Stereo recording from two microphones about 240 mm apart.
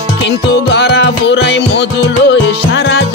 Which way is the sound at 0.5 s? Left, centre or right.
Left.